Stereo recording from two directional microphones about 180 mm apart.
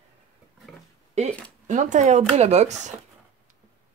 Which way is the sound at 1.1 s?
40° right (ahead or behind).